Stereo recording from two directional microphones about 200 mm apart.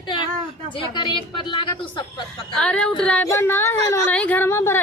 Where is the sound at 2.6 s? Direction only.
5° left (ahead or behind).